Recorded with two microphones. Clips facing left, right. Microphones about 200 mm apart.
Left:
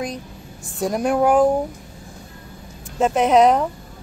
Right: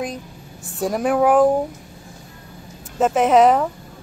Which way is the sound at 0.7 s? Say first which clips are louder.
Right 1 dB; 5° right (ahead or behind).